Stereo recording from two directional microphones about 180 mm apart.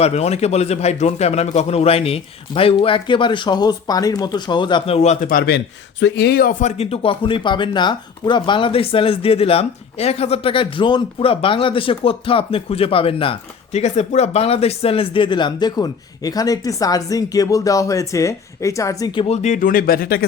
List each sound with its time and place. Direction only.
0.0 s speech: 35° left (ahead or behind)
5.0 s a man's voice: 50° left (ahead or behind)
6.0 s speech: 75° left (ahead or behind); by 20.2 s 55° left (ahead or behind)